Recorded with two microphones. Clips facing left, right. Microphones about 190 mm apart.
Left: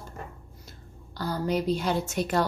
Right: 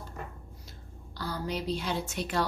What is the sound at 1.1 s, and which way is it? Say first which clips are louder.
A woman's voice: left 7 dB; 45° left (ahead or behind).